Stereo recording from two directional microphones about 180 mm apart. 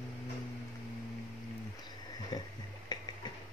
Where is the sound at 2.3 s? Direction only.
25° left (ahead or behind).